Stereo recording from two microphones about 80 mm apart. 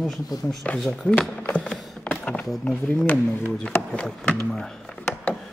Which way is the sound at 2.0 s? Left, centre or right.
Centre.